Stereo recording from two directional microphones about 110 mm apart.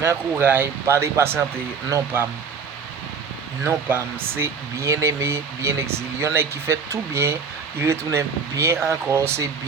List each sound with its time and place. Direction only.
0.0 s speech: 20° right (ahead or behind)
3.6 s speech: 20° right (ahead or behind)